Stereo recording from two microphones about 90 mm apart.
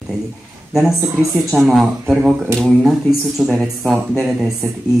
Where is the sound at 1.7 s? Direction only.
5° right (ahead or behind).